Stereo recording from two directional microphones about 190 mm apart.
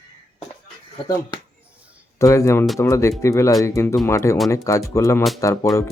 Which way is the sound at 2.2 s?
15° left (ahead or behind).